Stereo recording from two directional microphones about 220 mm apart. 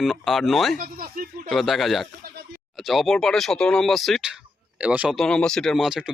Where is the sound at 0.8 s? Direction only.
40° right (ahead or behind).